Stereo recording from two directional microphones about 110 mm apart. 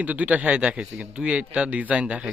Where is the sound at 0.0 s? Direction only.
15° right (ahead or behind).